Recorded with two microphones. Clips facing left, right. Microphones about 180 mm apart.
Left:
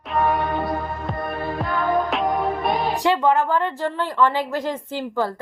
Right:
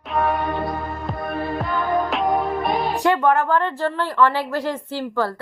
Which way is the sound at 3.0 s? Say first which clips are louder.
Right 1 dB; 20° left (ahead or behind).